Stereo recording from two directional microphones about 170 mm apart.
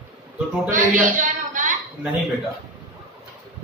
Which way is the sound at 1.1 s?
50° right (ahead or behind).